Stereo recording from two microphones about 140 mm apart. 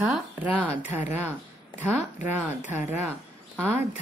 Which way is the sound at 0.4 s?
10° right (ahead or behind).